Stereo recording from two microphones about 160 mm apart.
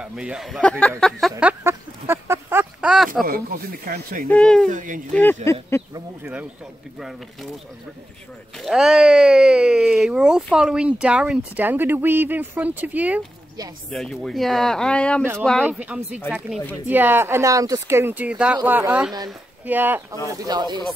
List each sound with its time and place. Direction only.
0.0 s speech: 5° right (ahead or behind)
1.4 s a sound: 10° right (ahead or behind)
3.3 s speech: 70° right (ahead or behind)
4.3 s speech: 5° left (ahead or behind)
4.6 s speech: 55° right (ahead or behind)
5.1 s speech: 10° left (ahead or behind)
8.5 s speech: centre (ahead or behind)
13.8 s speech: 5° left (ahead or behind)
20.2 s speech: 25° right (ahead or behind)